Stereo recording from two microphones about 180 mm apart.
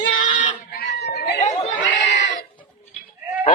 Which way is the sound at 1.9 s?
80° left.